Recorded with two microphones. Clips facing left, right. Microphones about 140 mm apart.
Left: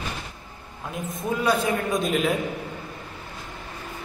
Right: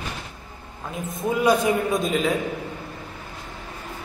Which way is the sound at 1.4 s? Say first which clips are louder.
Right 4 dB; 15° right (ahead or behind).